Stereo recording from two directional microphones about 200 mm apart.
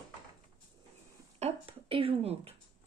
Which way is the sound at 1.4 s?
30° right (ahead or behind).